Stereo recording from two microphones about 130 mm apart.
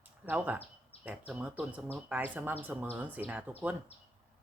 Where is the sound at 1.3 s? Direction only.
10° right (ahead or behind).